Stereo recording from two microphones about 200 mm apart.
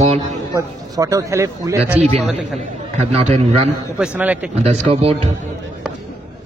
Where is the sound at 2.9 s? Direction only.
35° right (ahead or behind).